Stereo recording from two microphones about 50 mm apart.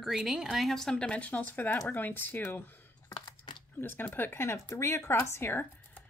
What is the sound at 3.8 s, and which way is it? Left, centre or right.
Speech, left.